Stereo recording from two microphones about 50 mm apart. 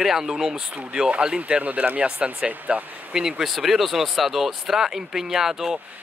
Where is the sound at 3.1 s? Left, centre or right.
Centre.